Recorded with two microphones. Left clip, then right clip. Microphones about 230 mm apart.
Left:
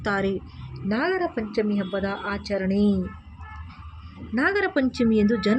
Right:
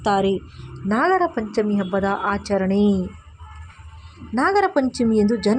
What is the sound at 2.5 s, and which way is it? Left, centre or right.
Speech, centre.